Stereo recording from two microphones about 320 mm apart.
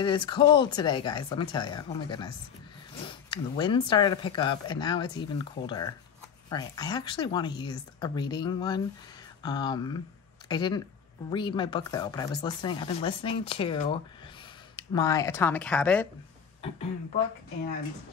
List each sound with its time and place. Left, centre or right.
0.0 s speech: centre